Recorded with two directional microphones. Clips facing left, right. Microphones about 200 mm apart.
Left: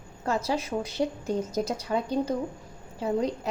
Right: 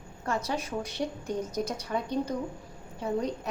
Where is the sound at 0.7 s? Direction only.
40° left (ahead or behind).